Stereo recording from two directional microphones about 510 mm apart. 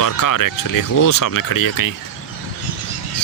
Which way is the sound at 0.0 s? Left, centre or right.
Left.